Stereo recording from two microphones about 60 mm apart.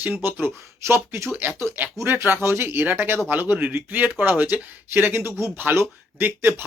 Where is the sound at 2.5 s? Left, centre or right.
Right.